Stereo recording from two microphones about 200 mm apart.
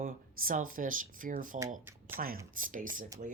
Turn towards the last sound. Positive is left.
turn(degrees=-40)  # may be behind; listen again after turning